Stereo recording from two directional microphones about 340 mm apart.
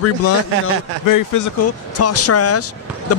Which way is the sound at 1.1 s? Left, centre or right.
Left.